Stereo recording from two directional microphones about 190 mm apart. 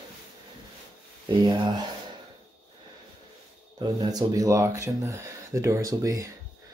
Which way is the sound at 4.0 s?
20° right (ahead or behind).